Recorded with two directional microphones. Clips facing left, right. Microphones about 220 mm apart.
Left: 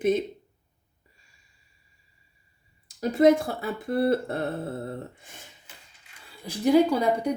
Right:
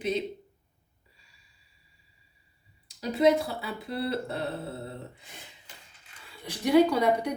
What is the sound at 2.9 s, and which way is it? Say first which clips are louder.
A woman's voice: left 4 dB; 50° left (ahead or behind).